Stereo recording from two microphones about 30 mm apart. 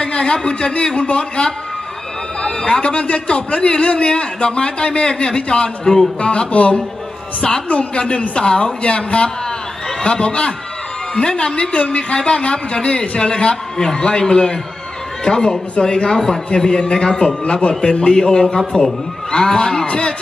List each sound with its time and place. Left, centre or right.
0.0 s a man's voice: left
2.6 s a man's voice: left
7.9 s a man's voice: left
13.3 s a man's voice: left
17.5 s a man's voice: left